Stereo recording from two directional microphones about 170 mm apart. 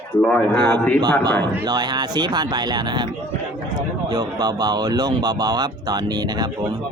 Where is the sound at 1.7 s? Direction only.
25° right (ahead or behind).